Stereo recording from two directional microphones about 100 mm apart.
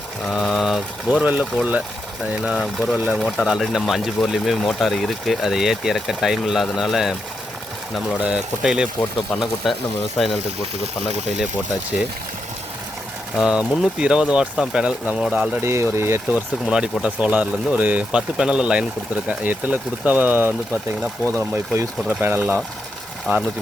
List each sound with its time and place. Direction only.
0.3 s speech: centre (ahead or behind)
1.2 s speech: 15° right (ahead or behind)
2.4 s speech: 5° right (ahead or behind)
8.2 s speech: 10° right (ahead or behind)
13.3 s speech: 5° right (ahead or behind)
15.6 s speech: 25° right (ahead or behind)
16.6 s speech: 10° right (ahead or behind)